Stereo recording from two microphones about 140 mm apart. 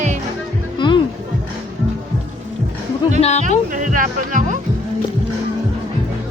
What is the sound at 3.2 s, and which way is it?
Speech, 50° left (ahead or behind).